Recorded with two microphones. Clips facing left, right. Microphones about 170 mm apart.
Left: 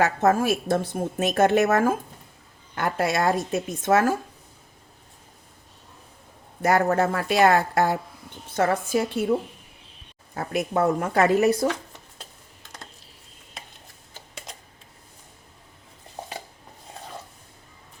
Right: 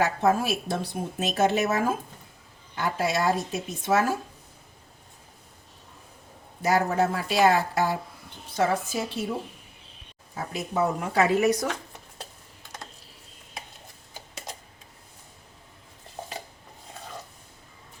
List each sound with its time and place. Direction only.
0.0 s a woman's voice: 50° left (ahead or behind)
6.6 s speech: 55° left (ahead or behind)
10.3 s speech: 60° left (ahead or behind); by 11.7 s 30° left (ahead or behind)